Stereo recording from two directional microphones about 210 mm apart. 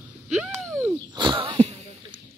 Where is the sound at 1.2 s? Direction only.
20° right (ahead or behind).